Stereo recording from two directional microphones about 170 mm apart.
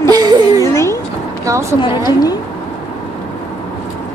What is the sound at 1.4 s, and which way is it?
Speech, 15° right (ahead or behind).